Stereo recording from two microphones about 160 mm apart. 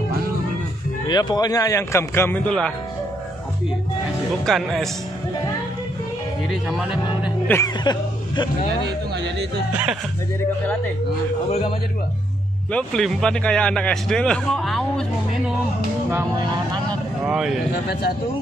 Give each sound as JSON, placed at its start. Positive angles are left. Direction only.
{"t": 1.0, "sound": "speech", "side_deg": 25}
{"t": 4.5, "sound": "a man's voice", "side_deg": 0}
{"t": 6.5, "sound": "a man's voice", "side_deg": -5}
{"t": 7.4, "sound": "speech", "side_deg": 15}
{"t": 7.8, "sound": "speech", "side_deg": 25}
{"t": 8.8, "sound": "speech", "side_deg": -90}
{"t": 12.7, "sound": "a man's voice", "side_deg": 5}
{"t": 17.2, "sound": "a man's voice", "side_deg": -5}